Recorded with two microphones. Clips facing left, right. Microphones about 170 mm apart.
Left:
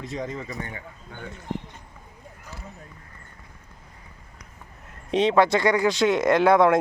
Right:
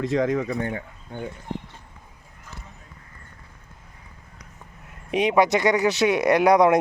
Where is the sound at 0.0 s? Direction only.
90° right; by 0.9 s 55° right (ahead or behind).